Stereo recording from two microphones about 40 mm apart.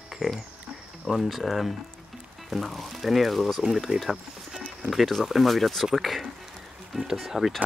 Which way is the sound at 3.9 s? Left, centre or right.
Right.